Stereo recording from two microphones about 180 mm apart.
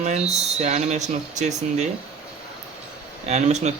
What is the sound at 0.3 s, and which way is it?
Speech, 40° right (ahead or behind).